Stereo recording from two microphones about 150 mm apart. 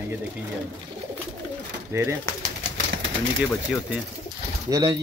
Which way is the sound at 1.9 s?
15° right (ahead or behind).